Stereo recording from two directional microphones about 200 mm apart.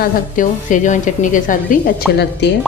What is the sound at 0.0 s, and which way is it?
A woman's voice, 40° left (ahead or behind).